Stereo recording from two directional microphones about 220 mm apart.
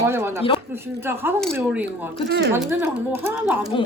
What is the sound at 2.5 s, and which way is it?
A woman's voice, 10° right (ahead or behind).